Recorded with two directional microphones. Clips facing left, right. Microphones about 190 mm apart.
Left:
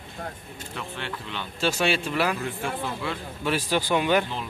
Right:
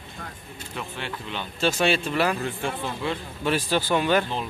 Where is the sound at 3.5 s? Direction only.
10° left (ahead or behind).